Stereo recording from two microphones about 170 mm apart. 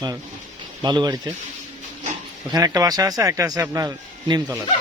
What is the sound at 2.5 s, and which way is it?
Speech, 20° right (ahead or behind).